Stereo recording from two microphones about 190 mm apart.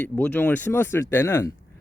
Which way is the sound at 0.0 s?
10° left (ahead or behind).